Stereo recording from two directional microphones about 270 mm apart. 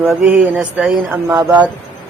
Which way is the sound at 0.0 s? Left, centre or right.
Centre.